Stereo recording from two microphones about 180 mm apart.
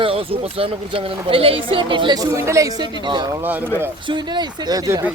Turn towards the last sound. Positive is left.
turn(degrees=-20)  # may be behind; listen again after turning